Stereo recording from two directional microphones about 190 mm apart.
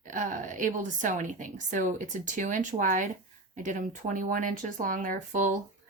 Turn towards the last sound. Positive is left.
turn(degrees=-40)  # may be behind; listen again after turning